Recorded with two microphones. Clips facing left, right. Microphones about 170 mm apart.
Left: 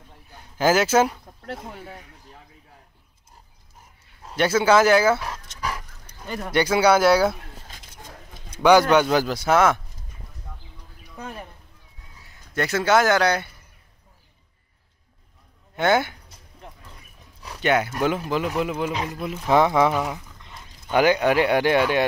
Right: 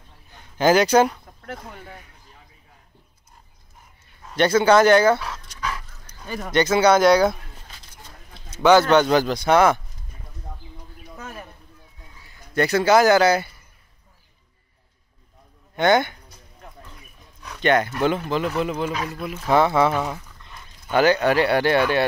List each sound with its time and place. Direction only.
0.6 s speech: 5° left (ahead or behind)
4.4 s speech: 5° left (ahead or behind)
6.4 s speech: 10° left (ahead or behind)
8.5 s speech: 10° left (ahead or behind)
12.2 s speech: centre (ahead or behind)
15.7 s speech: 5° left (ahead or behind)
17.6 s speech: 10° left (ahead or behind)
18.9 s speech: 20° left (ahead or behind)